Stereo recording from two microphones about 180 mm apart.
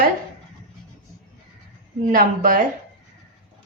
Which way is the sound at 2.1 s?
50° right (ahead or behind).